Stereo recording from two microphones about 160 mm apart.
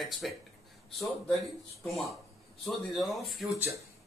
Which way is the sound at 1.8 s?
Centre (ahead or behind).